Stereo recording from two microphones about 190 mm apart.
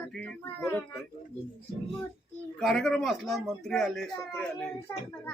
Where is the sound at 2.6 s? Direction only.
Centre (ahead or behind).